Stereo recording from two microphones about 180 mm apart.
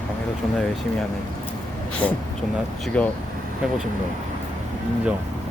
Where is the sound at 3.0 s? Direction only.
5° left (ahead or behind).